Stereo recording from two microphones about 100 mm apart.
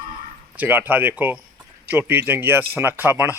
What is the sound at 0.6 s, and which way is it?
A man's voice, 20° right (ahead or behind).